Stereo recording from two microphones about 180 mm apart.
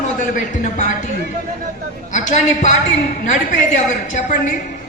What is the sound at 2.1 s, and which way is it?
Speech, 45° left (ahead or behind).